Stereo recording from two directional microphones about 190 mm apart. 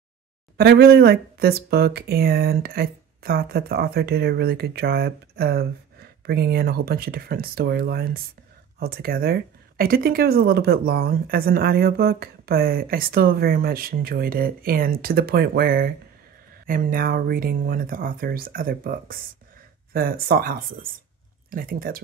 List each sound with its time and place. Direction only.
0.6 s speech: 55° right (ahead or behind)